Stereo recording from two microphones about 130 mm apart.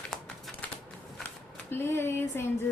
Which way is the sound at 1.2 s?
15° left (ahead or behind).